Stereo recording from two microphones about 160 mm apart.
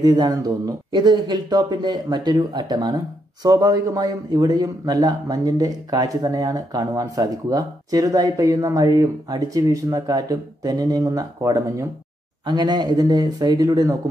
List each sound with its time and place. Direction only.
0.0 s a man's voice: 25° right (ahead or behind)